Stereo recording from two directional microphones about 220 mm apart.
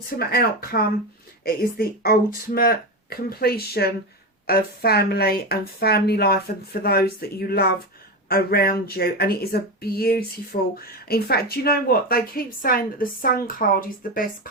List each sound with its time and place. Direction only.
0.2 s speech: 40° left (ahead or behind)